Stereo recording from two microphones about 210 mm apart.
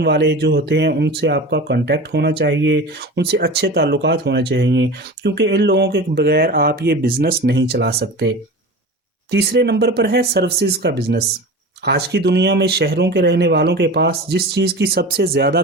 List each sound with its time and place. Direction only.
0.0 s speech: 50° right (ahead or behind)